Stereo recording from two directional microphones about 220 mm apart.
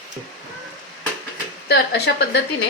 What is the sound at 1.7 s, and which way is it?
Speech, 50° left (ahead or behind).